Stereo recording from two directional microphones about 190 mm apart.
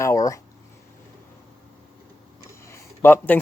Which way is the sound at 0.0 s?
15° left (ahead or behind).